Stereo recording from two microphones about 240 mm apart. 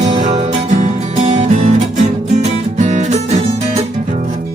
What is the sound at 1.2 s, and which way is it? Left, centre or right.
Music, right.